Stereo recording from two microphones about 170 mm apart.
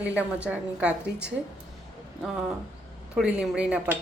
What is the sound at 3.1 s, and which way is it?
Speech, 5° right (ahead or behind).